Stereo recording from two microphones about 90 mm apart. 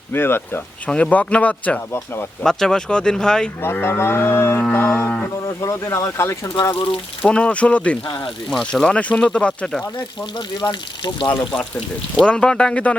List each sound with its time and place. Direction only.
0.1 s speech: 25° left (ahead or behind)
0.9 s speech: 10° left (ahead or behind)
2.4 s speech: 5° left (ahead or behind)
3.6 s speech: 25° left (ahead or behind)
7.2 s speech: 10° left (ahead or behind)
8.4 s speech: centre (ahead or behind)
9.0 s speech: 15° left (ahead or behind)
10.6 s speech: 60° left (ahead or behind)
12.2 s speech: 10° left (ahead or behind)